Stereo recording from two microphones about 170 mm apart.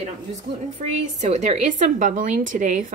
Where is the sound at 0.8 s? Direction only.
40° right (ahead or behind).